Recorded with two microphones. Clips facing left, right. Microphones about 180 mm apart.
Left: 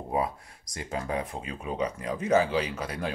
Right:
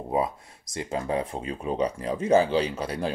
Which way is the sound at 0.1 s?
25° right (ahead or behind).